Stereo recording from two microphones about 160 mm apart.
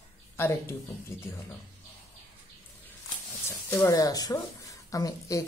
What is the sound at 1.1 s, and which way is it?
Speech, 15° left (ahead or behind).